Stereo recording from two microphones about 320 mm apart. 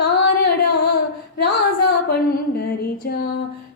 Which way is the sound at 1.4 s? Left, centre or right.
Left.